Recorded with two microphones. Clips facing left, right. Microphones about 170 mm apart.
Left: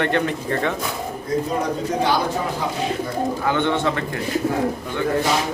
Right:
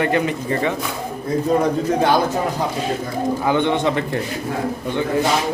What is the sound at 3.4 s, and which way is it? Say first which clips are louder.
Speech: right 3 dB; 15° right (ahead or behind).